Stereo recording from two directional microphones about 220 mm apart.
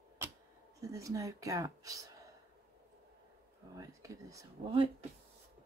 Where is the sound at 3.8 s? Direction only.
15° right (ahead or behind).